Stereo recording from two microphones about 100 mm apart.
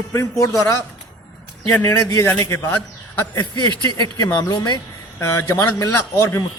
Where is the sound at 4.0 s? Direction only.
40° left (ahead or behind).